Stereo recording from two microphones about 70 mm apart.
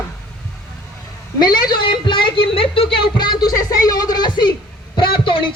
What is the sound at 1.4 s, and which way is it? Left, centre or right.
Speech, left.